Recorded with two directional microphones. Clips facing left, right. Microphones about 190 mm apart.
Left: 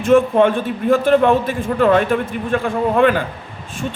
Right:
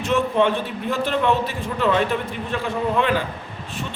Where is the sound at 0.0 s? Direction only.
50° left (ahead or behind).